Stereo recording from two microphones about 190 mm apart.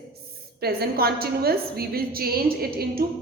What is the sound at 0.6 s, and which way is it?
A woman's voice, 55° right (ahead or behind).